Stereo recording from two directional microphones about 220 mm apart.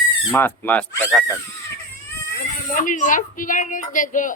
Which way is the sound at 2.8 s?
35° left (ahead or behind).